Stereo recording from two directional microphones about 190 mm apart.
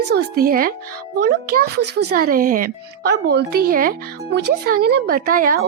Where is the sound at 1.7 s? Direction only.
60° right (ahead or behind).